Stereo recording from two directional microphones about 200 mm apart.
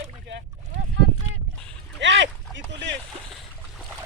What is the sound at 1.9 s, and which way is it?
Boat, 65° right (ahead or behind).